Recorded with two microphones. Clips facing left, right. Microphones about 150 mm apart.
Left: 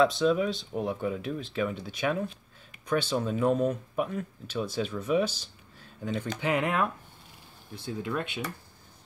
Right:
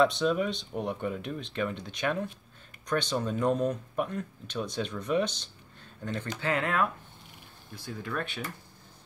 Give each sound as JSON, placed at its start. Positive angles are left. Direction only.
{"t": 0.0, "sound": "speech", "side_deg": 0}